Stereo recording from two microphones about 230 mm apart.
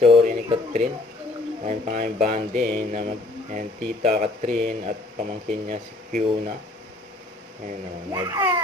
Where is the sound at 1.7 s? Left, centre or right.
Right.